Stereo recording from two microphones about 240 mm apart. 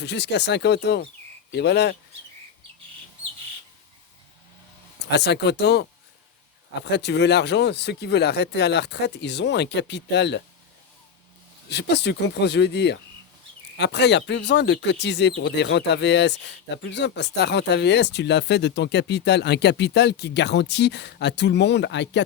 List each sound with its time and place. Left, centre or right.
0.0 s speech: left
5.1 s speech: left
6.9 s speech: left
11.7 s speech: left